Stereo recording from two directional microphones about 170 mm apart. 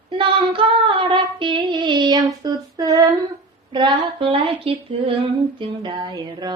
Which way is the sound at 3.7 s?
30° right (ahead or behind).